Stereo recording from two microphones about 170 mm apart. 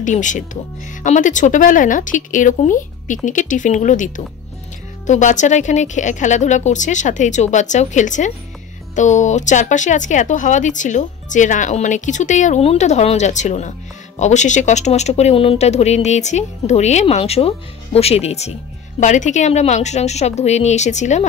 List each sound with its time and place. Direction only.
0.0 s speech: 45° left (ahead or behind)